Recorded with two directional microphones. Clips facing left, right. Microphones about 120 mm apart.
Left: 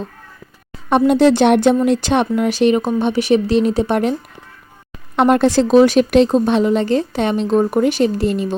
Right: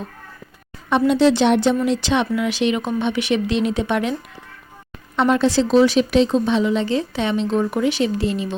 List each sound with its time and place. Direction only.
0.9 s speech: 50° left (ahead or behind)
5.1 s speech: 55° left (ahead or behind)